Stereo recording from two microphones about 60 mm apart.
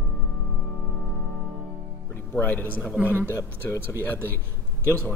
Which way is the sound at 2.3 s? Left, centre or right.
Left.